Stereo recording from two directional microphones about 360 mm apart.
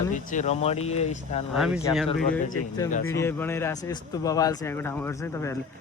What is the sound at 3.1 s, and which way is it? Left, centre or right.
Speech, centre.